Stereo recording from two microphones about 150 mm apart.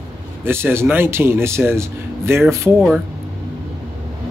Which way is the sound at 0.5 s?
15° right (ahead or behind).